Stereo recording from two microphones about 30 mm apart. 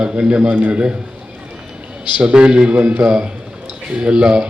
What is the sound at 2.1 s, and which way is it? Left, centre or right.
Speech, right.